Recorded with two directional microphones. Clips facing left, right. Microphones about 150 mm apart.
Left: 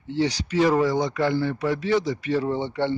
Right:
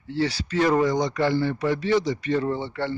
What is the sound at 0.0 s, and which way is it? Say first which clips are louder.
A man's voice: left 1 dB; 15° left (ahead or behind).